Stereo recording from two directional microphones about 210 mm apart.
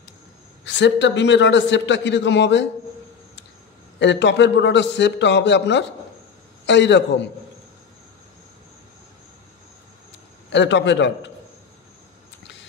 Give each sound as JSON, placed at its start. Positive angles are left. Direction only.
{"t": 0.7, "sound": "a man's voice", "side_deg": 60}
{"t": 4.0, "sound": "a man's voice", "side_deg": 55}
{"t": 10.5, "sound": "a man's voice", "side_deg": 55}